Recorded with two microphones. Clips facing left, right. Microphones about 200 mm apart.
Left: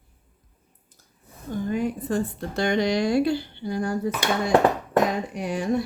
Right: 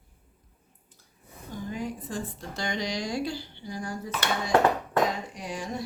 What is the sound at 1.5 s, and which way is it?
A woman's voice, 55° left (ahead or behind).